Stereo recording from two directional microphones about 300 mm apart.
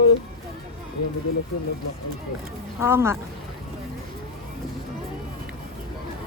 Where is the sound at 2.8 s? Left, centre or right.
Centre.